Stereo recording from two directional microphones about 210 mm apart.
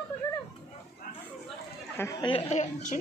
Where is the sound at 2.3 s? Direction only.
30° left (ahead or behind).